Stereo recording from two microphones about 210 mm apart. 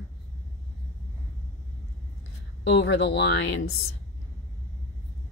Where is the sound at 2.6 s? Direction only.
55° left (ahead or behind).